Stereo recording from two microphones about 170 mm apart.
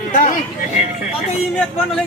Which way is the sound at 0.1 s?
55° left (ahead or behind).